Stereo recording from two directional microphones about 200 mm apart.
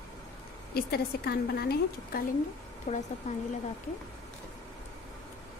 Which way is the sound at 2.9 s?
35° left (ahead or behind).